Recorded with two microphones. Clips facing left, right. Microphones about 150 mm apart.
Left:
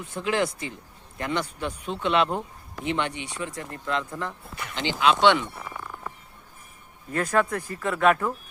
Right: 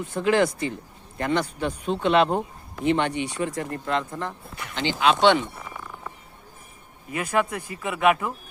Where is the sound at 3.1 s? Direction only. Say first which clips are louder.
Right 7 dB; 55° right (ahead or behind).